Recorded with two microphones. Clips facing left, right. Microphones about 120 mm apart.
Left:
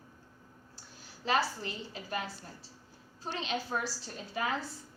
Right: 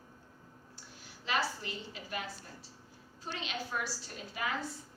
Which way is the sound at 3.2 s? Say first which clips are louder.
Left 4 dB; 35° left (ahead or behind).